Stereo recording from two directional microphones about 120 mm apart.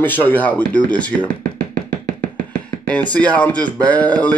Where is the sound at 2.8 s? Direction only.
10° left (ahead or behind).